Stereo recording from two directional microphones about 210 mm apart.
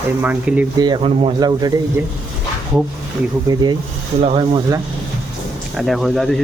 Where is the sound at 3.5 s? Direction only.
20° right (ahead or behind).